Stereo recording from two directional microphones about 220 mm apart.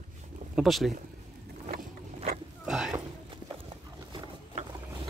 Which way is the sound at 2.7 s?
Centre (ahead or behind).